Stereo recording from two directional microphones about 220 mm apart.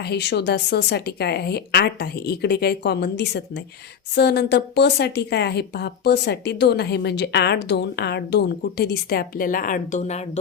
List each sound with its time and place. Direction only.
0.0 s a woman's voice: 50° left (ahead or behind); by 10.4 s 30° left (ahead or behind)